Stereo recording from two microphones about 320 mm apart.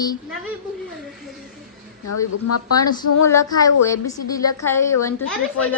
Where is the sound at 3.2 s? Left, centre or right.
Centre.